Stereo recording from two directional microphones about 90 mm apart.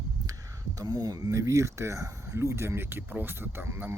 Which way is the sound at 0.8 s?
45° right (ahead or behind).